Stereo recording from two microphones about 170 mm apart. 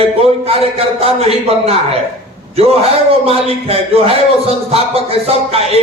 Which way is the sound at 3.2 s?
35° right (ahead or behind).